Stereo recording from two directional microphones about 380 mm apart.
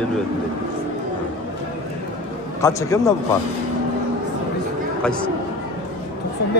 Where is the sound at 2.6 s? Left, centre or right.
Centre.